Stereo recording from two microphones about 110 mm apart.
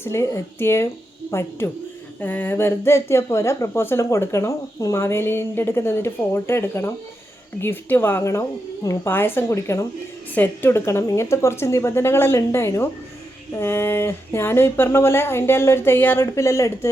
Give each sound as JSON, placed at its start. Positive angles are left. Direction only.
{"t": 0.0, "sound": "speech", "side_deg": 25}
{"t": 10.3, "sound": "speech", "side_deg": 15}